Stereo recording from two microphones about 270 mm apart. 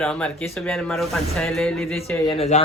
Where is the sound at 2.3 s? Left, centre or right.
Left.